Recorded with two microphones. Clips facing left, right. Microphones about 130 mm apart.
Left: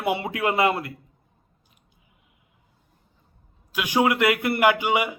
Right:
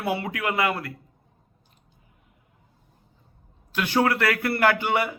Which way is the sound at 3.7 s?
10° left (ahead or behind).